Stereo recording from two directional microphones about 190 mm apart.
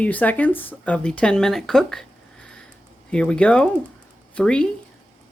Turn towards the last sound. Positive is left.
turn(degrees=5)  # may be behind; listen again after turning